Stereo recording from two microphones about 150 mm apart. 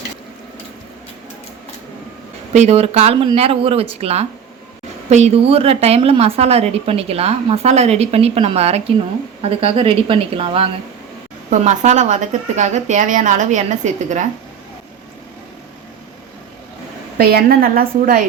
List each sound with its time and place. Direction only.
2.5 s a woman's voice: 45° right (ahead or behind)
11.5 s a woman's voice: 50° right (ahead or behind)
17.2 s a woman's voice: 90° right; by 18.2 s 75° right (ahead or behind)